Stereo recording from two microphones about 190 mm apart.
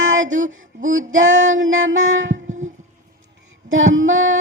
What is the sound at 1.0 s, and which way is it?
Female singing, 40° right (ahead or behind).